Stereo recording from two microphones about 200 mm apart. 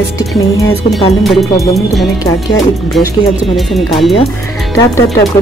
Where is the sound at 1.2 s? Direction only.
Centre (ahead or behind).